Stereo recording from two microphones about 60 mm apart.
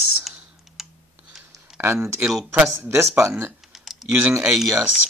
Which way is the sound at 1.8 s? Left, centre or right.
Right.